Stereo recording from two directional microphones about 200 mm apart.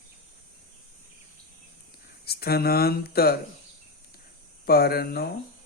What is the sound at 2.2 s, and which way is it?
Speech, 50° left (ahead or behind).